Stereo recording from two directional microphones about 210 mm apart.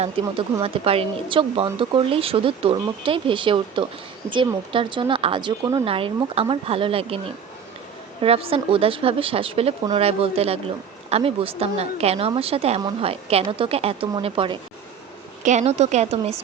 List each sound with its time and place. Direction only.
0.2 s a woman's voice: 25° right (ahead or behind)
8.2 s a woman's voice: 25° right (ahead or behind)